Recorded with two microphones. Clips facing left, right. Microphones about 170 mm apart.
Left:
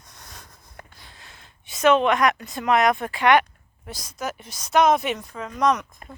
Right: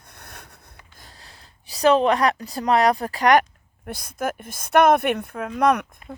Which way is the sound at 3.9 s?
55° right (ahead or behind).